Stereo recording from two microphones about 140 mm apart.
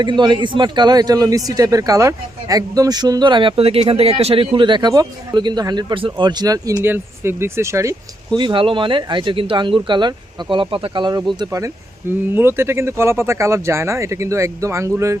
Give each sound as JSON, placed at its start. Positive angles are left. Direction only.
{"t": 0.0, "sound": "speech", "side_deg": -30}
{"t": 8.4, "sound": "speech", "side_deg": -35}
{"t": 11.3, "sound": "speech", "side_deg": -25}